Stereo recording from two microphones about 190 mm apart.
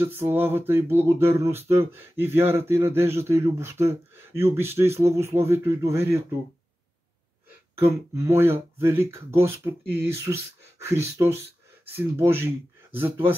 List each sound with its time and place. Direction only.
0.0 s speech: 10° right (ahead or behind)
7.8 s speech: 15° right (ahead or behind)